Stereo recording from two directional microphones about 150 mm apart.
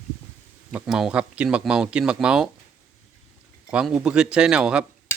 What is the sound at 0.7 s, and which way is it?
Speech, 5° right (ahead or behind).